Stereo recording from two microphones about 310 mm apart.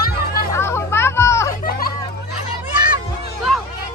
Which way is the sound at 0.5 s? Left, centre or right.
Centre.